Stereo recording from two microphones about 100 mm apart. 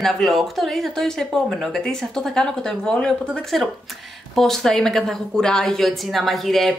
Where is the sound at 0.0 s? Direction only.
Centre (ahead or behind).